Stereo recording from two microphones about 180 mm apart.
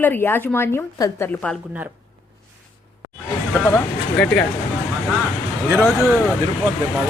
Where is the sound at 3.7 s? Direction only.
5° left (ahead or behind).